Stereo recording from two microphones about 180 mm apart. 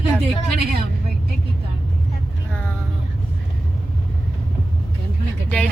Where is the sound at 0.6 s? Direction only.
60° right (ahead or behind).